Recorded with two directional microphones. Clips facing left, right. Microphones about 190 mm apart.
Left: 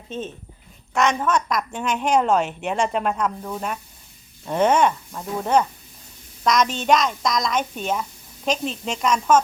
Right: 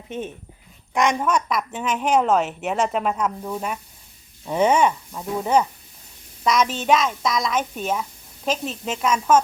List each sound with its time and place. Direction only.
0.1 s a woman's voice: 15° right (ahead or behind)